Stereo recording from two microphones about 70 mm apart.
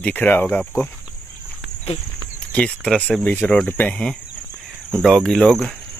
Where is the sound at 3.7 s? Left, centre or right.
Left.